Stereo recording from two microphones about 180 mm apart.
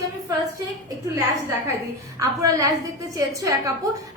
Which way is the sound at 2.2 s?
20° right (ahead or behind).